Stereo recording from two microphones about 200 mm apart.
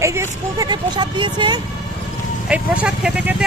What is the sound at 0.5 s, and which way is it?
Speech, 20° right (ahead or behind).